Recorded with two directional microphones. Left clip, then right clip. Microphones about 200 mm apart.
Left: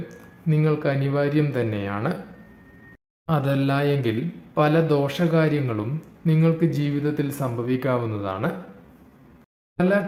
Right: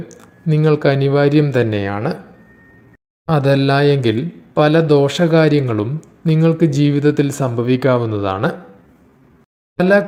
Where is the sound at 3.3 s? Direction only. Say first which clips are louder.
Right 9 dB; 30° right (ahead or behind).